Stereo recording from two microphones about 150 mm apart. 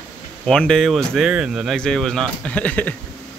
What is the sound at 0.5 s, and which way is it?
Speech, 5° left (ahead or behind).